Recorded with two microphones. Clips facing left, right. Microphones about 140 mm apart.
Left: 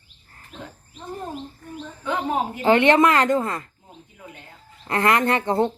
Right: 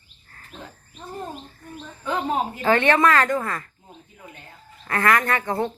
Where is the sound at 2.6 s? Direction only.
20° left (ahead or behind).